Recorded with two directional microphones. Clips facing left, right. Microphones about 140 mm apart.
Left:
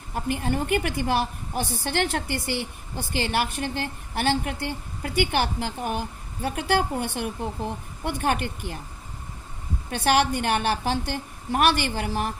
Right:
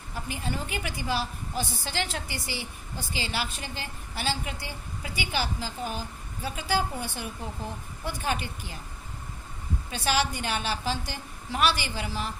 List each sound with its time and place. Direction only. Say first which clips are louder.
0.1 s a woman's voice: left 7 dB; 55° left (ahead or behind)
9.9 s a woman's voice: left 6 dB; 60° left (ahead or behind)